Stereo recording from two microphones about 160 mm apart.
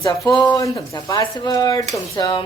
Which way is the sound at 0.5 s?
25° left (ahead or behind).